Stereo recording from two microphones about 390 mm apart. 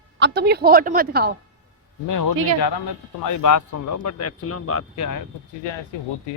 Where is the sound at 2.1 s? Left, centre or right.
Left.